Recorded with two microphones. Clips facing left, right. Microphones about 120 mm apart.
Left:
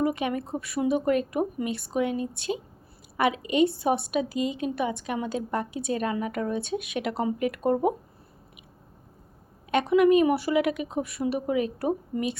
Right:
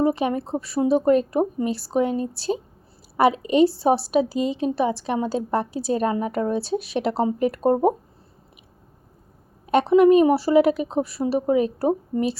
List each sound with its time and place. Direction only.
0.0 s a woman's voice: 35° right (ahead or behind)
9.6 s a woman's voice: 35° right (ahead or behind)